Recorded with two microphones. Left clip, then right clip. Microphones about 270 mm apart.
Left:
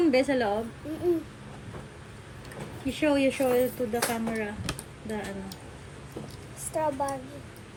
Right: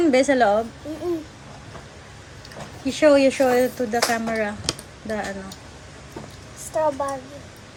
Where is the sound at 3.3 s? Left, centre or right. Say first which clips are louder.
Right 7 dB; right.